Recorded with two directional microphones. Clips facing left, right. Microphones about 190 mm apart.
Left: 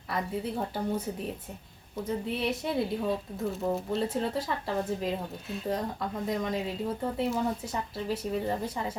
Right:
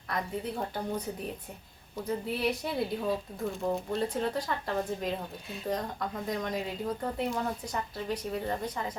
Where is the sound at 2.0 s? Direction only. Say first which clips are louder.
Even; centre (ahead or behind).